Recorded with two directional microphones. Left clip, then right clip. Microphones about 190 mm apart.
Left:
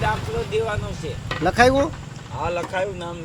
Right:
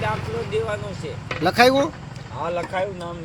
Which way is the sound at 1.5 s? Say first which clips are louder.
Even; centre (ahead or behind).